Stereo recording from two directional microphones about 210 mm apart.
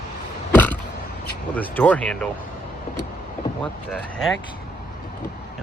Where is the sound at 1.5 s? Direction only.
5° left (ahead or behind).